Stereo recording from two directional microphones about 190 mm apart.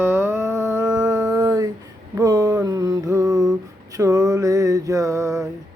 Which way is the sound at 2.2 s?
20° right (ahead or behind).